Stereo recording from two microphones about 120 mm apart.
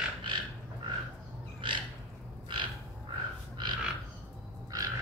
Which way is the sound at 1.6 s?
45° right (ahead or behind).